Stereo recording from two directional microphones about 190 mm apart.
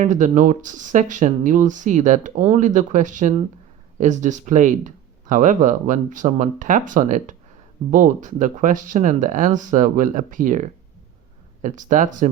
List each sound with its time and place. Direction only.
0.0 s speech: 40° right (ahead or behind)